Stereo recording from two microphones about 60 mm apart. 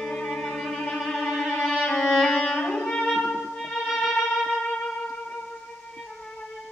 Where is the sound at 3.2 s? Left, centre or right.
Centre.